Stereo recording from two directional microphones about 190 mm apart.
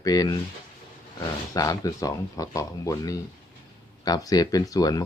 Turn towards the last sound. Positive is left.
turn(degrees=20)  # may be behind; listen again after turning